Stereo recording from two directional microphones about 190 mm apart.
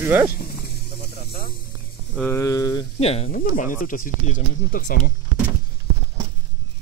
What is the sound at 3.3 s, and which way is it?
Speech, 45° left (ahead or behind).